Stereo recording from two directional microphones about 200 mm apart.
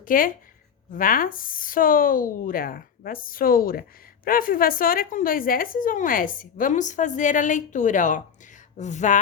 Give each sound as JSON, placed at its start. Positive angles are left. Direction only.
{"t": 0.0, "sound": "speech", "side_deg": 45}